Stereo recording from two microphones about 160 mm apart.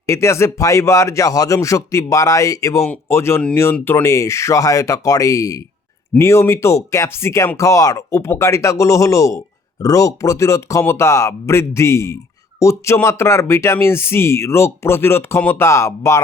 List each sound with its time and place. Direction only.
0.0 s speech: 15° left (ahead or behind)